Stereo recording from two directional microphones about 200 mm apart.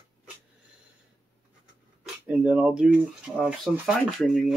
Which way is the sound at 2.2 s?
5° right (ahead or behind).